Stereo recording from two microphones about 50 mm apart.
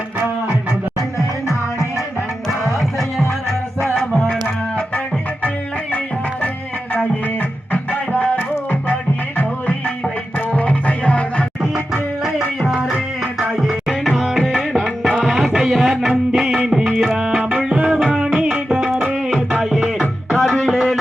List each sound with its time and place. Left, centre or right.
2.5 s music: centre
7.7 s music: left
10.5 s music: left
12.6 s music: centre
13.6 s tabla: centre
15.4 s music: centre
20.6 s a sound: centre